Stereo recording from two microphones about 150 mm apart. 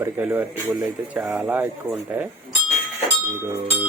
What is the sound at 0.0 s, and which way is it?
Speech, 10° right (ahead or behind).